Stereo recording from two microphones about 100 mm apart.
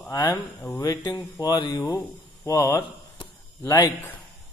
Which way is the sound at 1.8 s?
30° left (ahead or behind).